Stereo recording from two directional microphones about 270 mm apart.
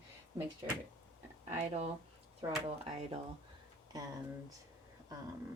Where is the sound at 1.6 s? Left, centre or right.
Right.